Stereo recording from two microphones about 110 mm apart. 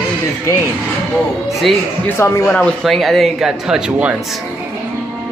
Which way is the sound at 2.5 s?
10° left (ahead or behind).